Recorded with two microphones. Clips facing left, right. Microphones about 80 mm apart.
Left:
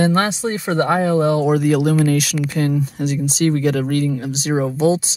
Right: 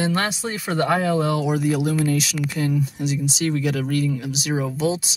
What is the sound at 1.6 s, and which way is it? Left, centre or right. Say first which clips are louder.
Speech: left 5 dB; left.